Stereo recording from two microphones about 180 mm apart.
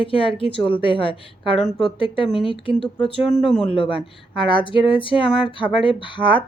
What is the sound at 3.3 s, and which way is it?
Speech, centre (ahead or behind).